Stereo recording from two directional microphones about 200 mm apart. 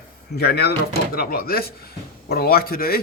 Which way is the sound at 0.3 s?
55° left (ahead or behind).